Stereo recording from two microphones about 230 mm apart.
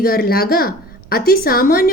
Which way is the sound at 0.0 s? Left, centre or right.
Left.